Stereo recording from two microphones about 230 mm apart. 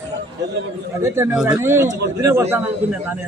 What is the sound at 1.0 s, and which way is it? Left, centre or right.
A man's voice, centre.